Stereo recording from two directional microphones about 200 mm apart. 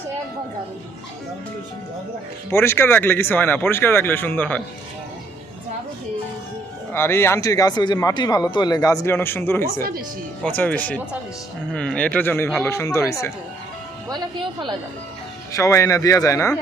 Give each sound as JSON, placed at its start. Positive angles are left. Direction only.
{"t": 2.5, "sound": "speech", "side_deg": 10}
{"t": 6.9, "sound": "speech", "side_deg": 10}
{"t": 14.1, "sound": "speech", "side_deg": -25}
{"t": 15.5, "sound": "speech", "side_deg": 15}